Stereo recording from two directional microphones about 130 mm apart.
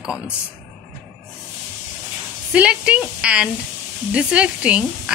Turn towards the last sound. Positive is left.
turn(degrees=-10)  # may be behind; listen again after turning